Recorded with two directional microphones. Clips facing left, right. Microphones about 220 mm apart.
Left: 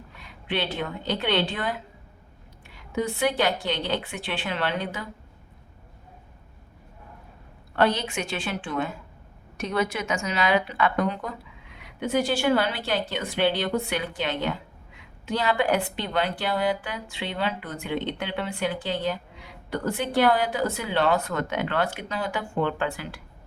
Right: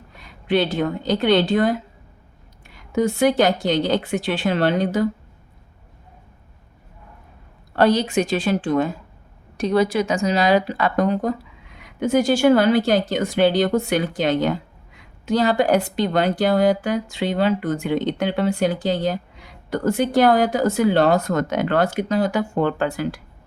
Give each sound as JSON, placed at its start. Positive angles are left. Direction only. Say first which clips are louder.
{"t": 0.2, "sound": "a woman's voice", "louder": "right 9 dB", "side_deg": -40}
{"t": 7.8, "sound": "a woman's voice", "louder": "right 7 dB", "side_deg": -40}